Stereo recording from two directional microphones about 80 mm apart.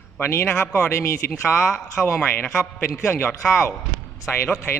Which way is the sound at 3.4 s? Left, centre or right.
Centre.